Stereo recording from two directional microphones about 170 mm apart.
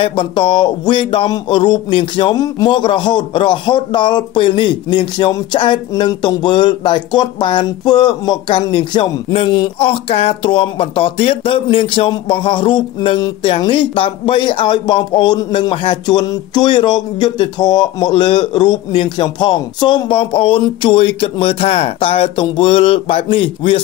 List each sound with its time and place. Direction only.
0.0 s speech: 30° left (ahead or behind)